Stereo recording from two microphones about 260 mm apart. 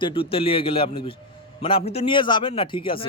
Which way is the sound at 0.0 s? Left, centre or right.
Centre.